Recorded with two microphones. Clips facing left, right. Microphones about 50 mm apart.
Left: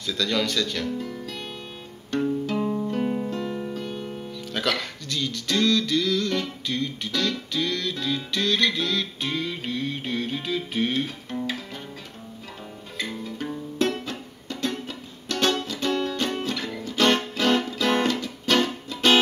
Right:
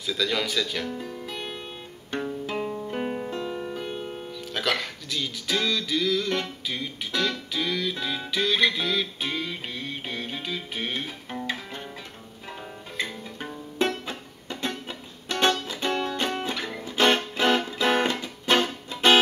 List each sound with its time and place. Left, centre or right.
0.0 s music: centre
0.8 s music: right
4.3 s speech: centre
6.7 s music: centre
11.3 s music: centre
12.9 s music: centre